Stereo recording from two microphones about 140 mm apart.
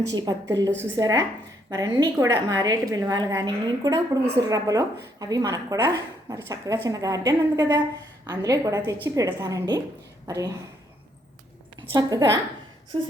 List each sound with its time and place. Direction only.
0.0 s a woman's voice: 30° right (ahead or behind)
11.9 s a woman's voice: 30° right (ahead or behind)